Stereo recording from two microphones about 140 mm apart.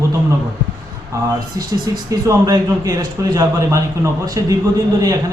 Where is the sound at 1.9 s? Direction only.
25° right (ahead or behind).